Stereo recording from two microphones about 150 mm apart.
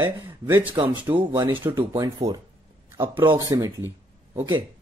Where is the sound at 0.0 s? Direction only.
10° right (ahead or behind).